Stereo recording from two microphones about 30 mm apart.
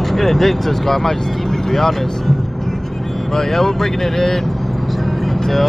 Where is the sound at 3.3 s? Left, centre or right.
Centre.